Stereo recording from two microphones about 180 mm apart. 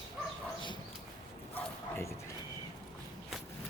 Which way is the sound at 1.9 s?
15° left (ahead or behind).